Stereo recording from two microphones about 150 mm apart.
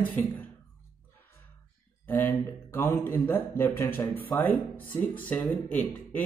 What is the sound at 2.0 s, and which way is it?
Speech, 10° left (ahead or behind).